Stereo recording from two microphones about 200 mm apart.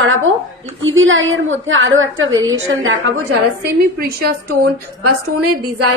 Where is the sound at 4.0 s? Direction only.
50° right (ahead or behind).